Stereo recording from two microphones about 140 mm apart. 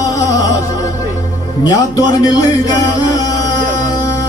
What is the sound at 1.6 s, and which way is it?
Speech, 25° left (ahead or behind).